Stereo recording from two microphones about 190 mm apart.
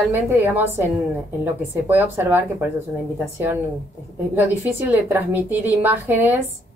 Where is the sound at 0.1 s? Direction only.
10° right (ahead or behind).